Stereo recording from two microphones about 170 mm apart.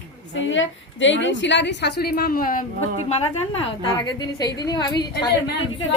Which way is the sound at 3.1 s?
35° left (ahead or behind).